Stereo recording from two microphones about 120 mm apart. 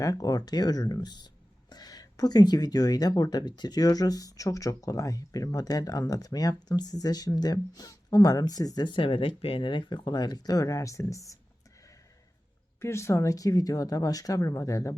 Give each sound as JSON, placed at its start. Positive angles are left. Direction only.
{"t": 0.0, "sound": "speech", "side_deg": 30}
{"t": 12.8, "sound": "speech", "side_deg": 25}